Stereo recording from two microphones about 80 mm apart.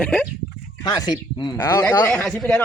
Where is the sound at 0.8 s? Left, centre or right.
Left.